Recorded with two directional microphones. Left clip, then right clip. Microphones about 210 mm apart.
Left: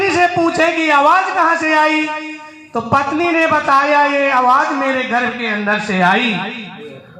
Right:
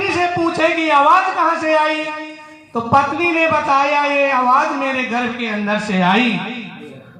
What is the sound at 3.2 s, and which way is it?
A man's voice, 20° left (ahead or behind).